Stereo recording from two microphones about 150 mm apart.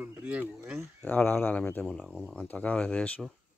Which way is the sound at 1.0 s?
10° left (ahead or behind).